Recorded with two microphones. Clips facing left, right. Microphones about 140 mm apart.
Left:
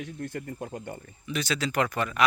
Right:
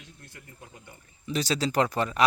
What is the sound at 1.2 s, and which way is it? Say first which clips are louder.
Speech: right 2 dB; 35° right (ahead or behind).